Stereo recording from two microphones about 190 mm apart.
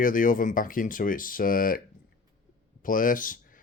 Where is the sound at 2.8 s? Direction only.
45° left (ahead or behind).